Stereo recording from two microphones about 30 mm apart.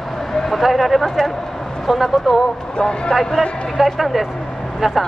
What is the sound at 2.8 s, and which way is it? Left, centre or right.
Speech, left.